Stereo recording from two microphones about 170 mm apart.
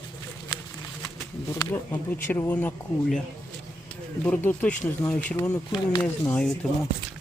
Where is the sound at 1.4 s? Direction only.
20° left (ahead or behind).